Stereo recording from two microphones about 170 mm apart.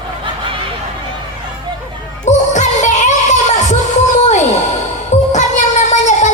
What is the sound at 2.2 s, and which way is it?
Music, 45° left (ahead or behind).